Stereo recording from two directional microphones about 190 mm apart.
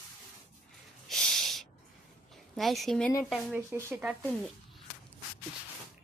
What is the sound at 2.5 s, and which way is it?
A woman's voice, centre (ahead or behind).